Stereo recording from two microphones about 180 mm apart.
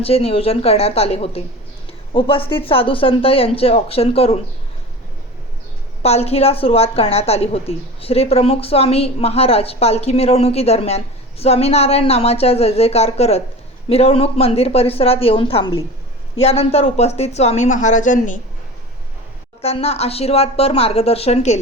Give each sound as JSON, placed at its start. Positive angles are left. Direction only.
{"t": 0.0, "sound": "a woman's voice", "side_deg": 35}
{"t": 6.0, "sound": "a woman's voice", "side_deg": 35}
{"t": 19.6, "sound": "a woman's voice", "side_deg": 35}